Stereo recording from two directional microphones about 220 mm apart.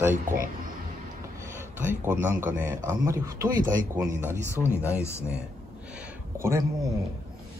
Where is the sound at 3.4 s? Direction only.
40° right (ahead or behind).